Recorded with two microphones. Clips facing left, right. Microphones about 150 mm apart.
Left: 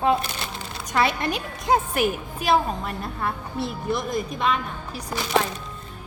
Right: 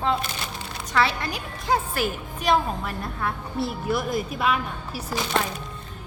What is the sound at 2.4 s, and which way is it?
A woman's voice, centre (ahead or behind).